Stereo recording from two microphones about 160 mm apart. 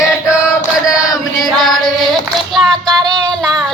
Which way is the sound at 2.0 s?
Centre (ahead or behind).